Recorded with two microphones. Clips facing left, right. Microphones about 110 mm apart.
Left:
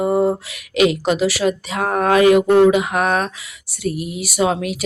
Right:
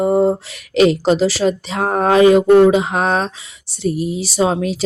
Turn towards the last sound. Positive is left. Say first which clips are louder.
# right 2 dB
turn(degrees=-30)  # may be behind; listen again after turning